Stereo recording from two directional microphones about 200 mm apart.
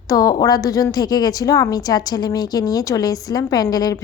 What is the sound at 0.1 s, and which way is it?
A woman's voice, 20° left (ahead or behind).